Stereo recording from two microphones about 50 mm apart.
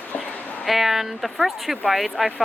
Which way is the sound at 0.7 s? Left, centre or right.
Centre.